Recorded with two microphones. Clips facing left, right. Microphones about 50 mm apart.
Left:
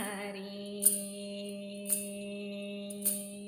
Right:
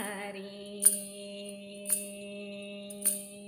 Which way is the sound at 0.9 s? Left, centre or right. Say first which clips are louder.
Left 2 dB; centre.